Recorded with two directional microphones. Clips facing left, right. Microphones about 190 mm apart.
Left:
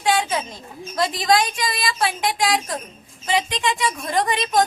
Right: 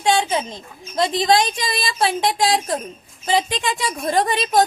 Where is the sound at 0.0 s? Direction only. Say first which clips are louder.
Right 2 dB; 25° right (ahead or behind).